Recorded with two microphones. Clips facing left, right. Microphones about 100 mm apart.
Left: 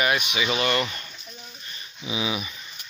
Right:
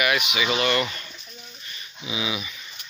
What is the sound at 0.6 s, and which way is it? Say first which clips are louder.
Speech: right 1 dB; 25° left (ahead or behind).